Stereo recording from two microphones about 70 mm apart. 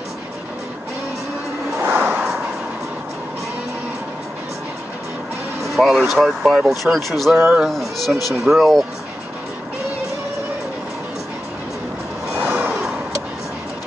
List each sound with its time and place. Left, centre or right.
1.9 s a sound: right
5.6 s speech: centre
12.4 s vehicle: right